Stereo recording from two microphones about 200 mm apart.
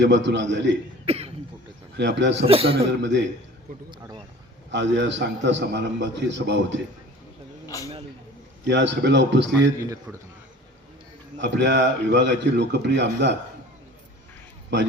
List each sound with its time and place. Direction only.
0.0 s a man's voice: 60° right (ahead or behind)
1.0 s cough: 30° right (ahead or behind)
2.0 s a man's voice: 60° right (ahead or behind)
2.5 s a man's voice: 30° right (ahead or behind)
3.0 s a man's voice: 65° right (ahead or behind)
4.7 s a man's voice: 65° right (ahead or behind)
7.7 s speech: 15° left (ahead or behind)
8.6 s a man's voice: 60° right (ahead or behind)
9.8 s a man's voice: 15° right (ahead or behind)
11.3 s a man's voice: 65° right (ahead or behind)
14.7 s a man's voice: 60° right (ahead or behind)